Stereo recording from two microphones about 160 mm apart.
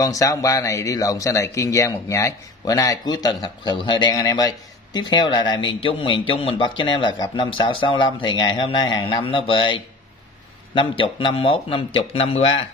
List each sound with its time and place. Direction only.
0.0 s a man's voice: 20° left (ahead or behind); by 12.5 s 35° left (ahead or behind)